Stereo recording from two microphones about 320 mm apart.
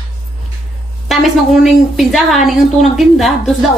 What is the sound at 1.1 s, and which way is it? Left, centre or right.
A woman's voice, centre.